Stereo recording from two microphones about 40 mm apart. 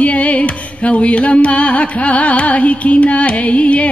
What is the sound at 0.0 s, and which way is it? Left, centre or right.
Music, left.